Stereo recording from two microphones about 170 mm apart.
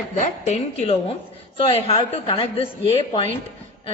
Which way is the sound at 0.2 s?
40° left (ahead or behind).